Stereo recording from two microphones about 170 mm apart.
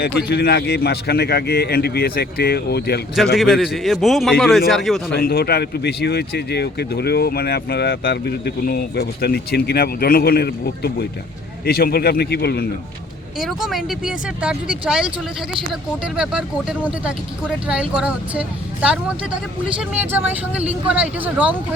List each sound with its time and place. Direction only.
0.0 s speech: 70° left (ahead or behind)
3.3 s speech: centre (ahead or behind)
5.1 s speech: 65° left (ahead or behind)
13.4 s speech: centre (ahead or behind)